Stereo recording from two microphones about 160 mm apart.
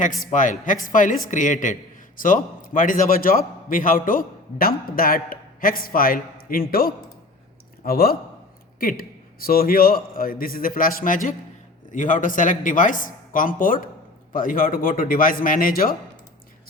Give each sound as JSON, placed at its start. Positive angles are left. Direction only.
{"t": 0.3, "sound": "a man's voice", "side_deg": 50}